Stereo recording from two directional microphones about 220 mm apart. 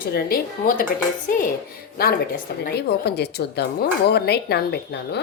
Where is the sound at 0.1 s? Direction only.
40° left (ahead or behind).